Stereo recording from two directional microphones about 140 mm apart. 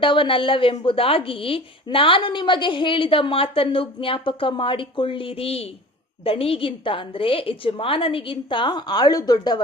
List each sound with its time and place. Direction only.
0.0 s a woman's voice: 35° left (ahead or behind)